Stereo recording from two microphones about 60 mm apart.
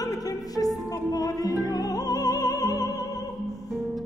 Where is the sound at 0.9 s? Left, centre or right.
Left.